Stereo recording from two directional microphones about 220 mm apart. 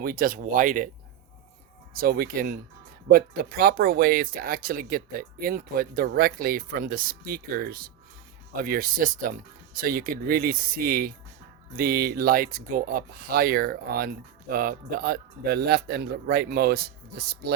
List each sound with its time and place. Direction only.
0.0 s speech: 40° right (ahead or behind)
2.0 s speech: 45° right (ahead or behind)